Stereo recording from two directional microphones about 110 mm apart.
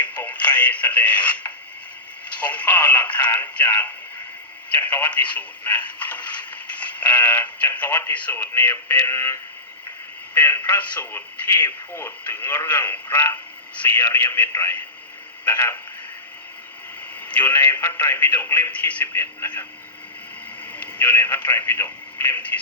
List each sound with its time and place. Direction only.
0.0 s radio: 15° left (ahead or behind)
2.3 s speech: 15° left (ahead or behind)
17.2 s speech: 15° left (ahead or behind)
20.7 s speech: 15° left (ahead or behind)